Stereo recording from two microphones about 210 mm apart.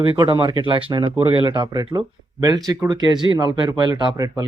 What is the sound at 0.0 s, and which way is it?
Speech, 25° right (ahead or behind).